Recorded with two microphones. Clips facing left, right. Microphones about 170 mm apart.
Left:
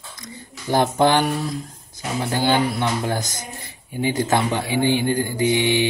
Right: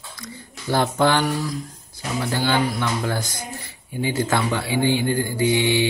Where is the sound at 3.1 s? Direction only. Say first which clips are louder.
Left 1 dB; 45° left (ahead or behind).